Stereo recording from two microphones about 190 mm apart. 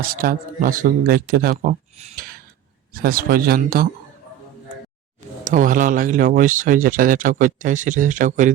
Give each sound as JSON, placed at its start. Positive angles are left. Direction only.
{"t": 0.1, "sound": "speech", "side_deg": -50}
{"t": 2.1, "sound": "a sound", "side_deg": -50}
{"t": 2.9, "sound": "speech", "side_deg": -50}
{"t": 5.5, "sound": "speech", "side_deg": -45}